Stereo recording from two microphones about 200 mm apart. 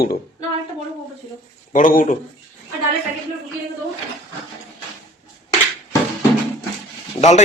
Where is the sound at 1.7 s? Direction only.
40° left (ahead or behind).